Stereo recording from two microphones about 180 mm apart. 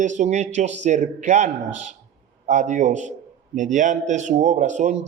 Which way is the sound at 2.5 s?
45° right (ahead or behind).